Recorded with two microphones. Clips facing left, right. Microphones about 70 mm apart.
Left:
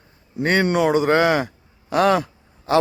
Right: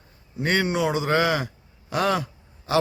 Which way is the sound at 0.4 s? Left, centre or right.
Left.